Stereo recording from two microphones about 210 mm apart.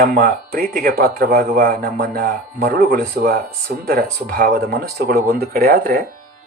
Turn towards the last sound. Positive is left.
turn(degrees=-45)  # may be behind; listen again after turning